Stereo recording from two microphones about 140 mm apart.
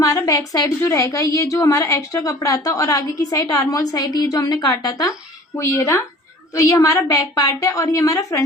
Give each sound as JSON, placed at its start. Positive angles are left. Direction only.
{"t": 0.0, "sound": "a woman's voice", "side_deg": 25}